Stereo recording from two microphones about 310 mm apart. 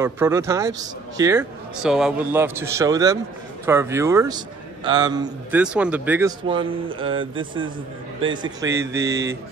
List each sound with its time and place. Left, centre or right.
0.0 s a man's voice: centre